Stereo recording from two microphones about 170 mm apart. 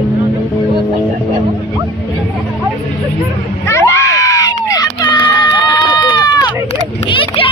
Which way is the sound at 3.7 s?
15° left (ahead or behind).